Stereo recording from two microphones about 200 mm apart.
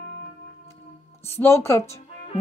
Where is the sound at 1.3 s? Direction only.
10° left (ahead or behind).